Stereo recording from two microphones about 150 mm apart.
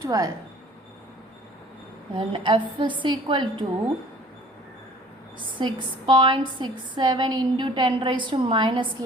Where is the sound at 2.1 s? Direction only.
35° right (ahead or behind).